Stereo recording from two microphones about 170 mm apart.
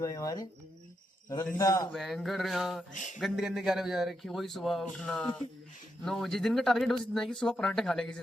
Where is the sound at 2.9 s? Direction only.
50° left (ahead or behind).